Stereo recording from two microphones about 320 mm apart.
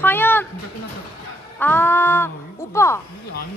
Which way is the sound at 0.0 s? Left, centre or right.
Centre.